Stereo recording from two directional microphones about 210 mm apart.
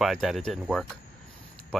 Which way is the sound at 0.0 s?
Centre (ahead or behind).